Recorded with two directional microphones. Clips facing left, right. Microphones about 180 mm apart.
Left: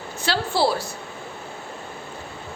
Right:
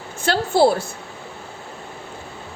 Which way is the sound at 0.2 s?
50° right (ahead or behind).